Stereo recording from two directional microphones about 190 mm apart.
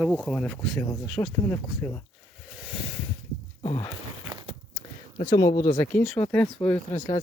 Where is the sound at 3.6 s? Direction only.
35° left (ahead or behind).